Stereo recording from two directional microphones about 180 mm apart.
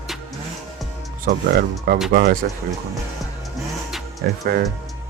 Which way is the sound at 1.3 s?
55° right (ahead or behind).